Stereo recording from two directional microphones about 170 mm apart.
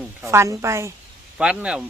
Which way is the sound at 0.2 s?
15° right (ahead or behind).